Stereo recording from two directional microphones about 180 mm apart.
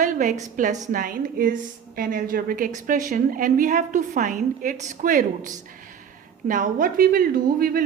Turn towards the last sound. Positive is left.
turn(degrees=-55)  # may be behind; listen again after turning